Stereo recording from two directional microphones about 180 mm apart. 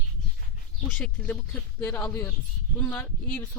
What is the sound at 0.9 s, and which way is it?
Speech, 5° left (ahead or behind).